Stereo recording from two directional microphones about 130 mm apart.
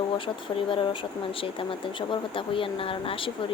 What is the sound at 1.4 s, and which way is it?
Speech, 40° left (ahead or behind).